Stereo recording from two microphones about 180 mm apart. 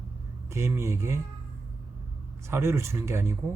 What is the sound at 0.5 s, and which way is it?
Speech, 15° right (ahead or behind).